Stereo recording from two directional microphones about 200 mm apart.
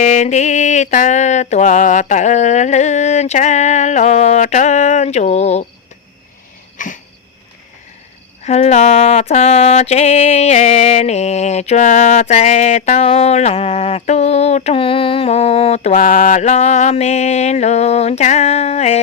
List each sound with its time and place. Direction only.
0.0 s mantra: 35° left (ahead or behind)
6.7 s cough: 40° left (ahead or behind)
8.4 s mantra: 35° left (ahead or behind)